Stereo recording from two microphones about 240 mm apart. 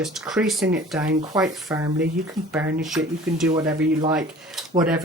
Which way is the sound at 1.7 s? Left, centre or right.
Centre.